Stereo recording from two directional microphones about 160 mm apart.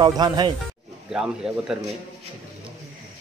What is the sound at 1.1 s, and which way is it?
Speech, 5° right (ahead or behind).